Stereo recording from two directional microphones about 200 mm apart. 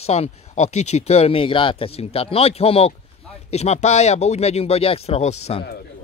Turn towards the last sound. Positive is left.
turn(degrees=30)  # may be behind; listen again after turning